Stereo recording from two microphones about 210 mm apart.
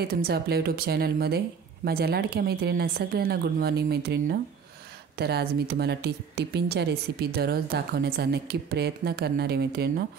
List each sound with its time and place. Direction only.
0.0 s speech: 45° right (ahead or behind)